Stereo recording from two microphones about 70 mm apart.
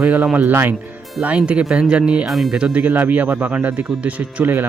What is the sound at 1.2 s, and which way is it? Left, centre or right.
Speech, centre.